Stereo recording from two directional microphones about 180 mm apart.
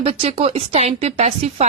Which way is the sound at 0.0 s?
30° right (ahead or behind).